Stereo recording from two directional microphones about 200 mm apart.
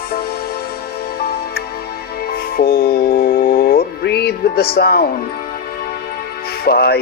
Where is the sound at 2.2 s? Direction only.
50° left (ahead or behind).